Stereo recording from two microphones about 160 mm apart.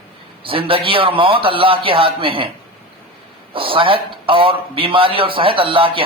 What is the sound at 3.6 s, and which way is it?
A man's voice, 35° right (ahead or behind).